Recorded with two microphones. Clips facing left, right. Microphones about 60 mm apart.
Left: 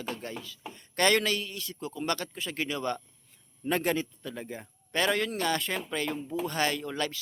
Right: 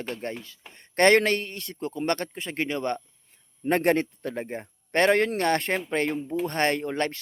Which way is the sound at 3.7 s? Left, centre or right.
Right.